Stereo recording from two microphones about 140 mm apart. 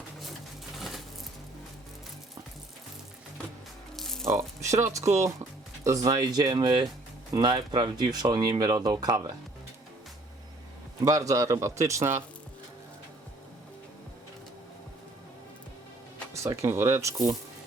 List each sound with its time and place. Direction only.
0.8 s coin: centre (ahead or behind)
3.9 s music: 5° left (ahead or behind)
4.3 s speech: 20° right (ahead or behind)
11.0 s speech: 25° right (ahead or behind)
16.3 s speech: 20° right (ahead or behind)